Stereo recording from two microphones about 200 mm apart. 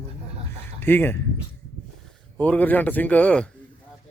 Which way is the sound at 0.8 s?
10° left (ahead or behind).